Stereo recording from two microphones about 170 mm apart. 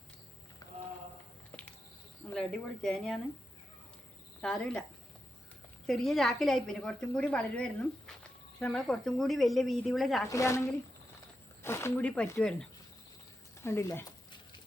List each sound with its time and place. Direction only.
0.6 s a sound: 20° left (ahead or behind)
2.3 s a woman's voice: 5° left (ahead or behind)
4.4 s speech: 5° left (ahead or behind)
5.8 s a woman's voice: centre (ahead or behind)
10.2 s speech: 20° left (ahead or behind)
13.6 s speech: 15° left (ahead or behind)